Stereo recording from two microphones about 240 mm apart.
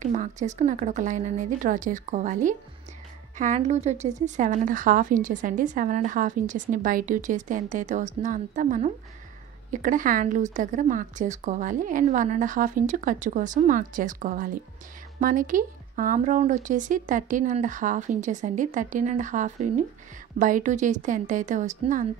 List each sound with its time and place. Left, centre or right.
0.0 s a woman's voice: right